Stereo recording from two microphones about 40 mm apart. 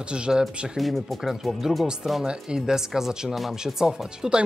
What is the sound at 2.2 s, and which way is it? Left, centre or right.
Speech, centre.